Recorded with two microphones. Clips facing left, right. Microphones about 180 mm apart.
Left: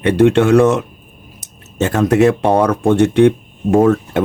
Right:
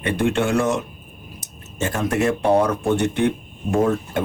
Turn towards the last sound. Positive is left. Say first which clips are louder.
# left 7 dB
turn(degrees=70)  # may be behind; listen again after turning